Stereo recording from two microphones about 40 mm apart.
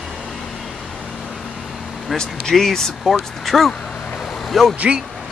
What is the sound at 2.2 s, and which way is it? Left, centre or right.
Speech, centre.